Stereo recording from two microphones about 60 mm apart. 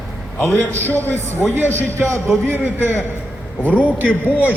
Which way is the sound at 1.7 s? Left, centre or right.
Right.